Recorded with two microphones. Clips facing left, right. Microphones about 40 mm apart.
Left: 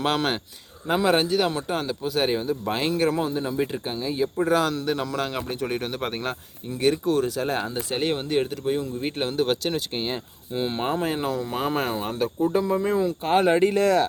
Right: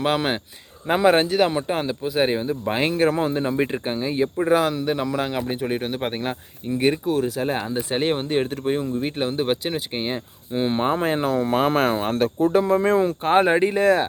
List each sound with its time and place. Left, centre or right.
0.0 s speech: centre
1.0 s speech: right
7.0 s speech: centre
7.7 s speech: right
9.0 s speech: centre
9.3 s speech: right
10.8 s speech: right
13.2 s speech: right
13.7 s speech: right